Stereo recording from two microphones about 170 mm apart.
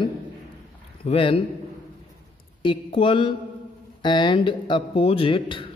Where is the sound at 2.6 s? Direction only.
30° left (ahead or behind).